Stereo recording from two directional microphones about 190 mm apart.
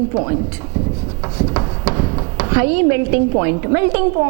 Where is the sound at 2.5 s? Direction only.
15° right (ahead or behind).